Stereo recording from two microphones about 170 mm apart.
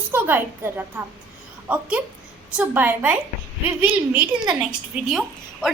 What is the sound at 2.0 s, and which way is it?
A woman's voice, 10° right (ahead or behind).